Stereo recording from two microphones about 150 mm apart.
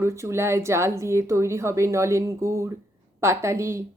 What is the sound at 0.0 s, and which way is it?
A woman's voice, 20° right (ahead or behind).